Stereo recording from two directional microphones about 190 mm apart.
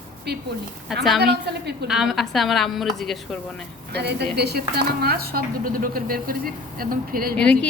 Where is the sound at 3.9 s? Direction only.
60° right (ahead or behind).